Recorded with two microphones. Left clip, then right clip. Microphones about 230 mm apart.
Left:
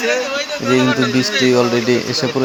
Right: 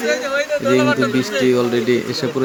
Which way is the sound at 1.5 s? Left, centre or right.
Centre.